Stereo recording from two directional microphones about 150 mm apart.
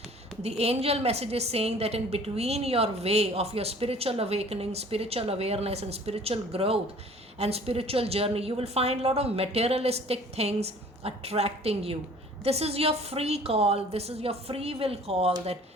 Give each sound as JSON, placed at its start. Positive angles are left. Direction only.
{"t": 0.4, "sound": "a woman's voice", "side_deg": -45}